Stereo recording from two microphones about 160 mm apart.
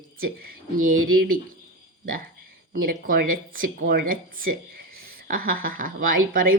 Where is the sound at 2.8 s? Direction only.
65° right (ahead or behind).